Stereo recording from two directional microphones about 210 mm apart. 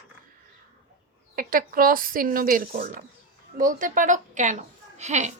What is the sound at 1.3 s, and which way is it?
A woman's voice, 40° right (ahead or behind).